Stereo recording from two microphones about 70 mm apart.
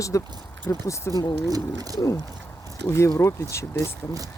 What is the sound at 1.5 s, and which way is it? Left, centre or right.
Speech, right.